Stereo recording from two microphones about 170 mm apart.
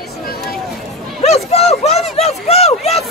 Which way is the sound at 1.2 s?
40° left (ahead or behind).